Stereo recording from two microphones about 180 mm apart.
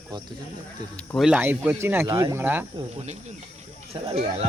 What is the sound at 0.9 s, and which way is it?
Speech, 5° left (ahead or behind).